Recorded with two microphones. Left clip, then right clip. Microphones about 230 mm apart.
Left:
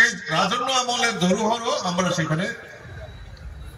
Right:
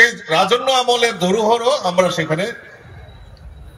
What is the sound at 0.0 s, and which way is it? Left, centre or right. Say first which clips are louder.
A man's voice: right 6 dB; right.